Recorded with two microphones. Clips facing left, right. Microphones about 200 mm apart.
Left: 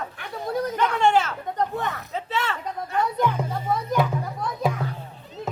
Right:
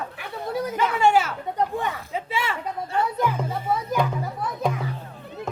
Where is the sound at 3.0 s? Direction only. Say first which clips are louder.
Left 1 dB; 5° right (ahead or behind).